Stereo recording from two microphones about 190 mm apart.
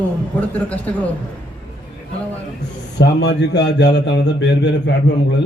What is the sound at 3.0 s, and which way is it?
A man's voice, 65° left (ahead or behind).